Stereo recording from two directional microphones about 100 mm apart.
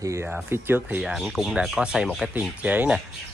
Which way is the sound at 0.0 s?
30° right (ahead or behind).